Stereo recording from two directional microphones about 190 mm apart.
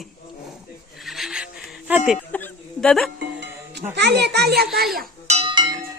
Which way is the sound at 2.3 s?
5° left (ahead or behind).